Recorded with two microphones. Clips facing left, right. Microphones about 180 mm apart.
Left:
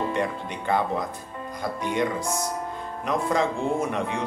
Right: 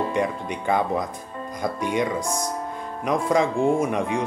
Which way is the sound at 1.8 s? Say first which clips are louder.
Right 1 dB; 15° right (ahead or behind).